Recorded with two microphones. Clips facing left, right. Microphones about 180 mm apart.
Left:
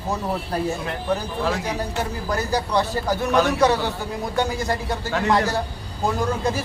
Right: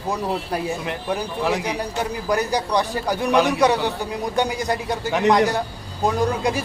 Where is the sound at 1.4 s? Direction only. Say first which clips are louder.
Right 2 dB; 15° right (ahead or behind).